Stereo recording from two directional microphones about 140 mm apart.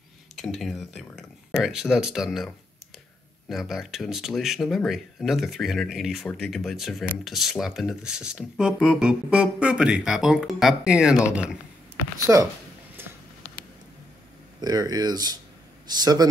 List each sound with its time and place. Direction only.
0.4 s speech: centre (ahead or behind)
12.3 s speech: 20° right (ahead or behind)
14.6 s speech: 30° right (ahead or behind)